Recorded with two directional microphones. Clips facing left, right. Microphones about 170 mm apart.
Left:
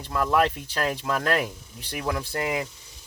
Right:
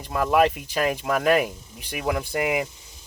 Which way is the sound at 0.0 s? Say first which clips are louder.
Right 3 dB; 15° right (ahead or behind).